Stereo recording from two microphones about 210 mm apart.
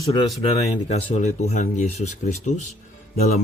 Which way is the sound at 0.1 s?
25° left (ahead or behind).